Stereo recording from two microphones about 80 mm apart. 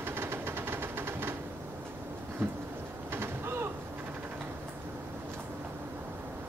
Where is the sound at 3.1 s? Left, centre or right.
Right.